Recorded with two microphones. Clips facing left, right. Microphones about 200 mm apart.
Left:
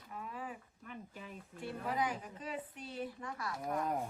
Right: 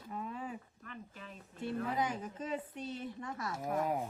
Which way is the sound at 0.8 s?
10° left (ahead or behind).